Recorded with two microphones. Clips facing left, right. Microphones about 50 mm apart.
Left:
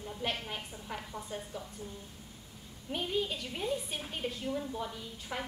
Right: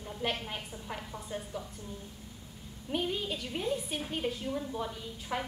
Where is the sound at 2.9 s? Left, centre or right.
Centre.